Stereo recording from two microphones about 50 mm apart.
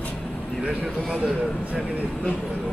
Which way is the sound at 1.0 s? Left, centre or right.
Right.